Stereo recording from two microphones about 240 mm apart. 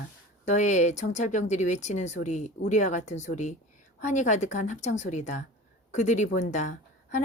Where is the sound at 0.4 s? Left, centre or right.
Left.